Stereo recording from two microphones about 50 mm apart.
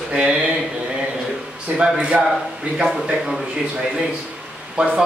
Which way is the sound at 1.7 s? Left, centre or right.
Right.